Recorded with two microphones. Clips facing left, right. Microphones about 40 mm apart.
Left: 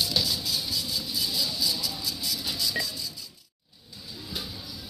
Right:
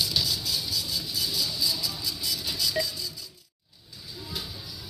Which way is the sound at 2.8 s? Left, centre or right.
Centre.